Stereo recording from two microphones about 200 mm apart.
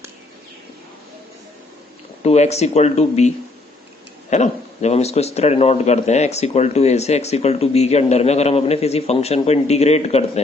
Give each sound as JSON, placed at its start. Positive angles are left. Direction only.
{"t": 2.2, "sound": "speech", "side_deg": 35}